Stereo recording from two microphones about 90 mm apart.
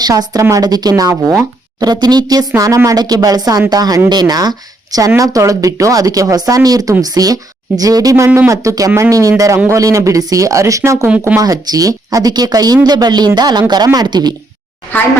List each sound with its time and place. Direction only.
0.0 s speech: 45° right (ahead or behind)